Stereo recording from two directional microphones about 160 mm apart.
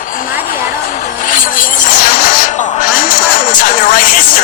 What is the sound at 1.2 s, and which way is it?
Music, 60° left (ahead or behind).